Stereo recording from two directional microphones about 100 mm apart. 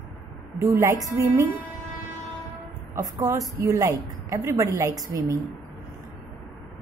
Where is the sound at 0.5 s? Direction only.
25° right (ahead or behind).